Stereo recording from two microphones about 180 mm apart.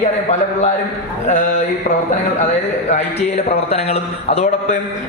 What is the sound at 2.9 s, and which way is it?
A man's voice, 35° left (ahead or behind).